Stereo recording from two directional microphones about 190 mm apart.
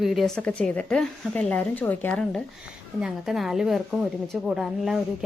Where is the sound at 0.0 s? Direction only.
Centre (ahead or behind).